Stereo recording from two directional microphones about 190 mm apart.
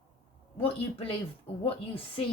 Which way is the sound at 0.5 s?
30° left (ahead or behind).